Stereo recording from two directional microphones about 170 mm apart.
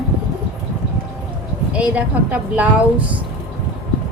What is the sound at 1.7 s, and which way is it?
A woman's voice, 10° right (ahead or behind).